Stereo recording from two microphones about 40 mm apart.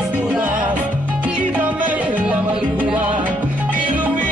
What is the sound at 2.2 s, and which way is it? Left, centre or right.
Music, right.